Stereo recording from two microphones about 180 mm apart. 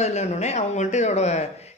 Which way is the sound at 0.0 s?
40° left (ahead or behind).